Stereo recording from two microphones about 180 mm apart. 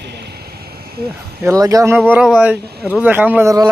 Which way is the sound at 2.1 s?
5° right (ahead or behind).